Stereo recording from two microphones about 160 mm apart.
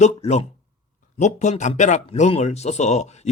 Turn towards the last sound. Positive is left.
turn(degrees=45)  # may be behind; listen again after turning